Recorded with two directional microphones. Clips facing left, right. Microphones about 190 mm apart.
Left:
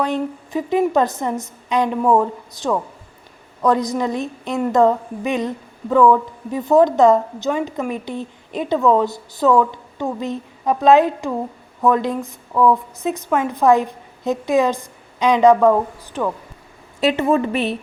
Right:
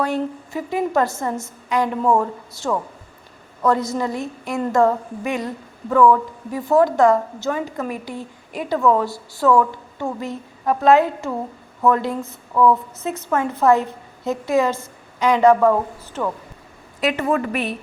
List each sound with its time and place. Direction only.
0.0 s a woman's voice: 20° left (ahead or behind)
17.0 s a woman's voice: 30° left (ahead or behind)